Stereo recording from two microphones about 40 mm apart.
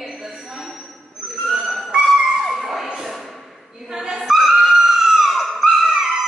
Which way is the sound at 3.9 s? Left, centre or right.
Centre.